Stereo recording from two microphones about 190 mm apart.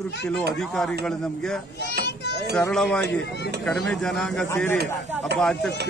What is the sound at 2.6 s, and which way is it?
Speech, 5° left (ahead or behind).